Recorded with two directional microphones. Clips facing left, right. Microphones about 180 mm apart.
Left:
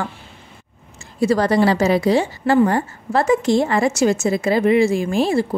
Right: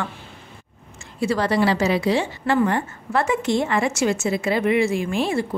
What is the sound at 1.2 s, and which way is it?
A woman's voice, 40° left (ahead or behind).